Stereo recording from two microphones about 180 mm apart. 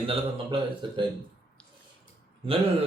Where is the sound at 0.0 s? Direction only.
30° right (ahead or behind).